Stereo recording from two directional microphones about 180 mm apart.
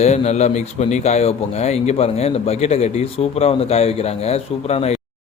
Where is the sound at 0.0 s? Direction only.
40° left (ahead or behind).